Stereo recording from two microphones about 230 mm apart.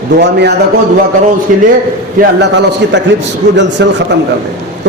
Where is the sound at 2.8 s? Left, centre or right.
Right.